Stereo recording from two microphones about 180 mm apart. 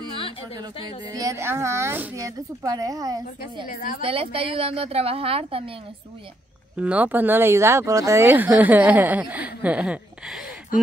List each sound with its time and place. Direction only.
1.1 s speech: 15° right (ahead or behind)
3.6 s speech: 50° left (ahead or behind)
4.0 s a woman's voice: 30° right (ahead or behind)
6.8 s speech: 10° right (ahead or behind)